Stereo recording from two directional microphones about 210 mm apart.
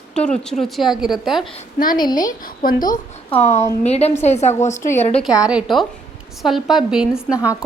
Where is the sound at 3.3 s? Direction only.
30° left (ahead or behind).